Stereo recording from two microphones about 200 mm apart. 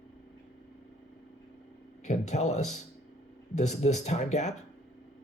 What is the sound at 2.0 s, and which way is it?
Speech, 35° left (ahead or behind).